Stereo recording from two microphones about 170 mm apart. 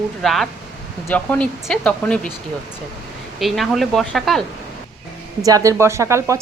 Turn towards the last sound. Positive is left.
turn(degrees=-15)  # may be behind; listen again after turning